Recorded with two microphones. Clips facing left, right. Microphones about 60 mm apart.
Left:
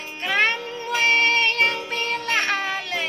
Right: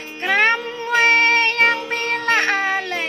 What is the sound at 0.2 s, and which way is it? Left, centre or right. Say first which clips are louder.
Music: right 5 dB; right.